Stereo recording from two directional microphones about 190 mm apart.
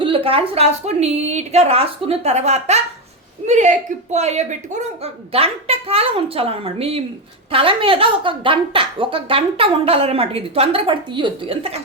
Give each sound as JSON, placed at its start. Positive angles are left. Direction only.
{"t": 0.0, "sound": "a woman's voice", "side_deg": -30}